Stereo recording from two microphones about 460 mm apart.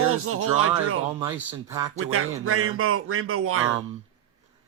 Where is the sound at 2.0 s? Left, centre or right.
Right.